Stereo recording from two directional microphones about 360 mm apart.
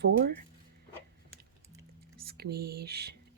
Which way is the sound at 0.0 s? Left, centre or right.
Right.